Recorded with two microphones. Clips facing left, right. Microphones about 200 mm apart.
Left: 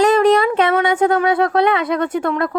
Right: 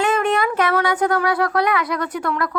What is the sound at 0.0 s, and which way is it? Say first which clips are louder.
Speech: left 6 dB; 35° left (ahead or behind).